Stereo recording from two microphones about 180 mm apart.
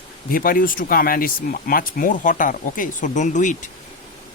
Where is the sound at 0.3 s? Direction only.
50° left (ahead or behind).